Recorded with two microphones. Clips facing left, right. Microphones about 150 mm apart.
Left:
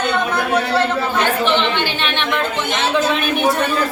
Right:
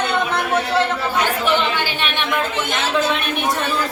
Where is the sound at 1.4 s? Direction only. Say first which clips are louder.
Left 2 dB; 10° right (ahead or behind).